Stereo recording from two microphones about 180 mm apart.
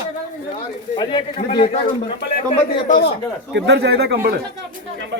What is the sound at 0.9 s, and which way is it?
Speech, 25° left (ahead or behind).